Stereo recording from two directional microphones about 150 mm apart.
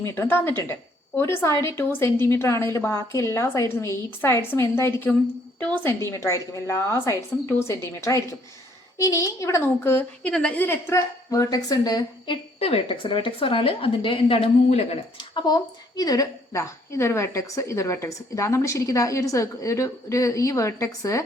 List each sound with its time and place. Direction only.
0.0 s a woman's voice: 15° left (ahead or behind); by 14.9 s 40° left (ahead or behind)
15.2 s a woman's voice: 30° left (ahead or behind)